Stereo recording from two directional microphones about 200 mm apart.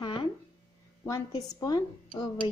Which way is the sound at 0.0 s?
20° left (ahead or behind).